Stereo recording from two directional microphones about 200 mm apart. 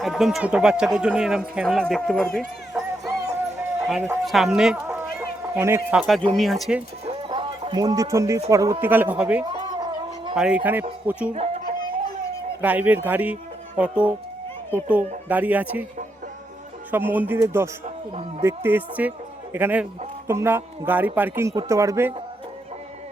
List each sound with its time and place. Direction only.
0.0 s speech: centre (ahead or behind)
3.1 s music: 15° right (ahead or behind)
3.8 s speech: 5° right (ahead or behind)
4.9 s speech: 15° right (ahead or behind)
7.0 s a sound: 30° right (ahead or behind)
8.4 s speech: 15° right (ahead or behind)
9.5 s a sound: 25° right (ahead or behind)
10.3 s speech: 5° right (ahead or behind)
12.6 s speech: 10° right (ahead or behind)
15.3 s speech: 10° right (ahead or behind)
16.9 s speech: 10° right (ahead or behind)
18.1 s speech: 30° right (ahead or behind)
18.4 s speech: 10° right (ahead or behind)